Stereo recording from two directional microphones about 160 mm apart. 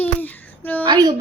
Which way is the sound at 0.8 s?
25° right (ahead or behind).